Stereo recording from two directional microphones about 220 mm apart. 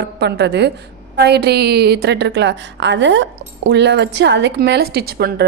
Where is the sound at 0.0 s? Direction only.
50° right (ahead or behind).